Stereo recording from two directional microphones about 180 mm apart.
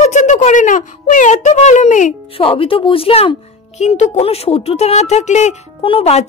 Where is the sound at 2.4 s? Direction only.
30° left (ahead or behind).